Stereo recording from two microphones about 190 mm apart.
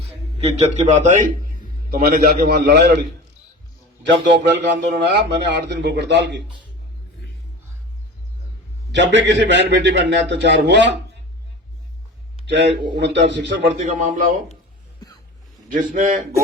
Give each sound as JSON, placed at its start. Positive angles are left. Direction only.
{"t": 0.3, "sound": "a man's voice", "side_deg": -35}
{"t": 1.9, "sound": "a man's voice", "side_deg": -50}
{"t": 4.0, "sound": "a man's voice", "side_deg": -65}
{"t": 8.9, "sound": "a man's voice", "side_deg": -70}
{"t": 13.0, "sound": "a man's voice", "side_deg": -65}
{"t": 13.7, "sound": "a man's voice", "side_deg": -45}
{"t": 15.7, "sound": "a man's voice", "side_deg": -45}